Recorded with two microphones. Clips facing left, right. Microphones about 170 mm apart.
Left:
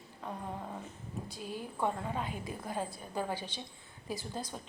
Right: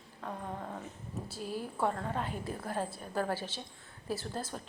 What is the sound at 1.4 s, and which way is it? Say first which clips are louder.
Speech: right 4 dB; 35° right (ahead or behind).